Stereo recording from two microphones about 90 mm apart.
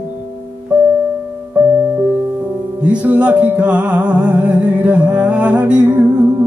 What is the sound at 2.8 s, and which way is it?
Music, 15° right (ahead or behind).